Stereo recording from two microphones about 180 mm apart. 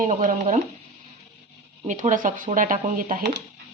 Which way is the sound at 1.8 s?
45° right (ahead or behind).